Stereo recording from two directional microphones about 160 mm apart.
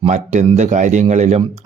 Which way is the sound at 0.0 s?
45° right (ahead or behind).